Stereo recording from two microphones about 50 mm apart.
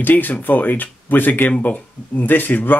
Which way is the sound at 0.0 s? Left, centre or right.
Left.